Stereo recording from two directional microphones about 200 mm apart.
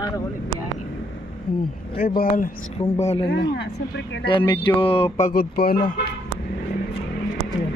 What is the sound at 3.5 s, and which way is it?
Speech, 60° left (ahead or behind).